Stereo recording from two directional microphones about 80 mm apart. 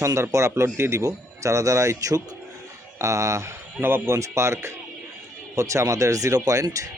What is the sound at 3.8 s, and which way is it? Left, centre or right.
A man's voice, right.